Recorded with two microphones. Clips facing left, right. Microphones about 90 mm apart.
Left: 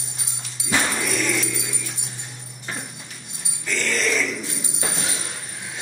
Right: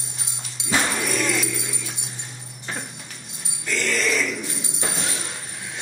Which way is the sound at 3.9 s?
10° right (ahead or behind).